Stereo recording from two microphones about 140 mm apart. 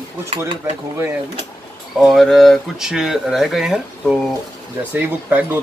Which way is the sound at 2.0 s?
Centre (ahead or behind).